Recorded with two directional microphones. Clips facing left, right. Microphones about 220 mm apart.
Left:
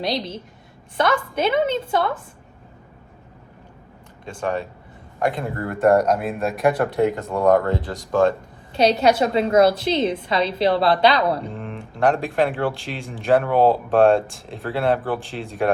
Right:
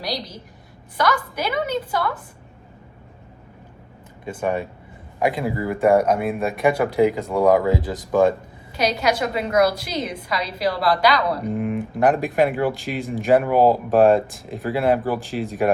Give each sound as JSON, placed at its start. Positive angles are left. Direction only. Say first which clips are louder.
{"t": 0.0, "sound": "a woman's voice", "louder": "left 4 dB", "side_deg": 25}
{"t": 4.3, "sound": "speech", "louder": "right 1 dB", "side_deg": -10}
{"t": 8.7, "sound": "a woman's voice", "louder": "left 4 dB", "side_deg": 30}
{"t": 11.5, "sound": "speech", "louder": "right 9 dB", "side_deg": -10}